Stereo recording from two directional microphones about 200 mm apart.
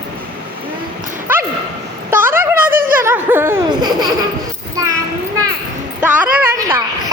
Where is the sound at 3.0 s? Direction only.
10° right (ahead or behind).